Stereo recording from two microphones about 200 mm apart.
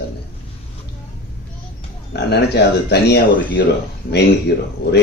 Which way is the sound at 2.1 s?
55° left (ahead or behind).